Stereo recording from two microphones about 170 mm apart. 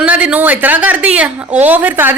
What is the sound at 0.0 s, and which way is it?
A woman's voice, 5° right (ahead or behind).